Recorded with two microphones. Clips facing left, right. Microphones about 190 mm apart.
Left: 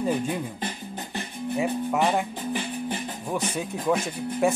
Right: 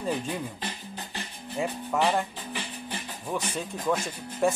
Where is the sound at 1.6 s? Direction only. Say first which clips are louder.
Left 2 dB; 10° left (ahead or behind).